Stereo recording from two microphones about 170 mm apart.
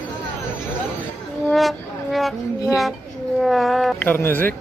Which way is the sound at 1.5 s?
Centre (ahead or behind).